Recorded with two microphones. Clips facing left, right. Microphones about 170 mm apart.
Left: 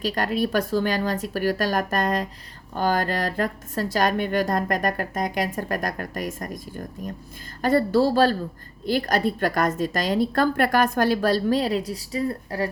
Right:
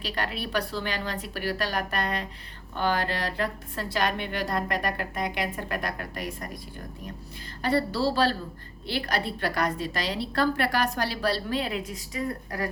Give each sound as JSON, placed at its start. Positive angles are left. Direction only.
{"t": 0.0, "sound": "a woman's voice", "side_deg": 45}